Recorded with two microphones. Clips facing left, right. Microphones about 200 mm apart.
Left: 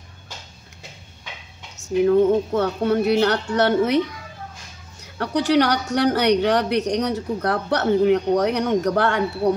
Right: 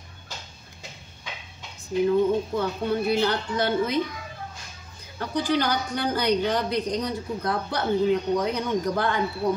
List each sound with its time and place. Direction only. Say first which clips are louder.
2.5 s speech: left 6 dB; 75° left (ahead or behind)
5.0 s speech: left 5 dB; 70° left (ahead or behind)